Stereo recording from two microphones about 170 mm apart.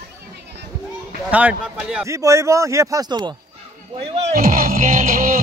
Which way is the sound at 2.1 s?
20° right (ahead or behind).